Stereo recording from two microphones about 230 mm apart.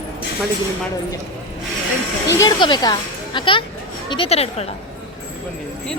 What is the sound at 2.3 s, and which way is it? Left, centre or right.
Speech, centre.